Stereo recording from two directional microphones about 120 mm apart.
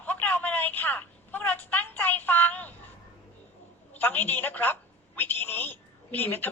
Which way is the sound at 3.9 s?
15° left (ahead or behind).